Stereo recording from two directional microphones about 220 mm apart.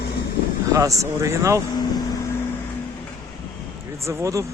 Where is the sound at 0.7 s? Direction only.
15° right (ahead or behind).